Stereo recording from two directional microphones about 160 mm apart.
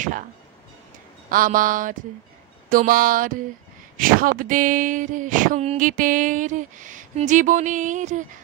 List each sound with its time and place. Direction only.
1.3 s speech: 60° right (ahead or behind)